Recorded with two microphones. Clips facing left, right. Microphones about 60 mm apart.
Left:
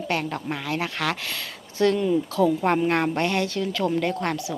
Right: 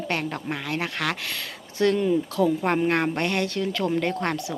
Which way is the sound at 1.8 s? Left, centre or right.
Right.